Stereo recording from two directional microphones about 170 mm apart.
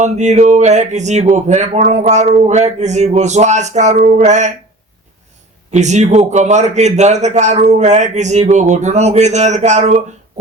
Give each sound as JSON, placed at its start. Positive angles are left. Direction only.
{"t": 0.0, "sound": "speech", "side_deg": -45}
{"t": 5.7, "sound": "speech", "side_deg": -45}